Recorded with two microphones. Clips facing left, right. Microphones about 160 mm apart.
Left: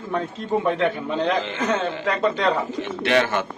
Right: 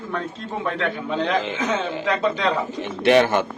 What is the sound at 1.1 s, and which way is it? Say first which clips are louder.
Speech: even; 5° left (ahead or behind).